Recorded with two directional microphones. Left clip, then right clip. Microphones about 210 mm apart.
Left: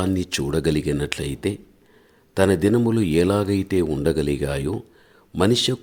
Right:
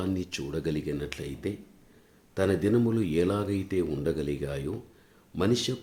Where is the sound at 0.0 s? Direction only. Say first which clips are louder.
Left 9 dB; 45° left (ahead or behind).